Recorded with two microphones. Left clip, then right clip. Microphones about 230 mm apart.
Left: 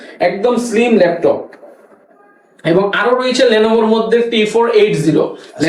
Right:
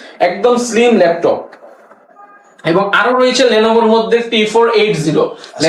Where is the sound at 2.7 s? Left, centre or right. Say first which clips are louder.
Right 1 dB; centre.